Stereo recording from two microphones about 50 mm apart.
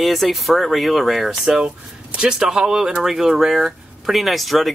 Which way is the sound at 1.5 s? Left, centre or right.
Centre.